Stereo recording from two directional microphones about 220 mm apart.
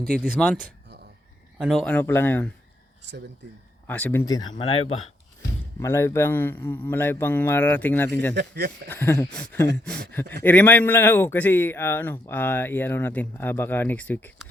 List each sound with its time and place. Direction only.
0.1 s speech: 5° left (ahead or behind)
3.8 s speech: 10° left (ahead or behind); by 4.9 s 25° left (ahead or behind)
5.8 s speech: 10° left (ahead or behind)
8.4 s speech: 50° right (ahead or behind)
8.9 s speech: 10° left (ahead or behind)